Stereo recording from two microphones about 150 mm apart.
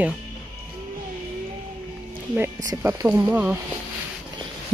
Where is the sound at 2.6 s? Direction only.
25° right (ahead or behind).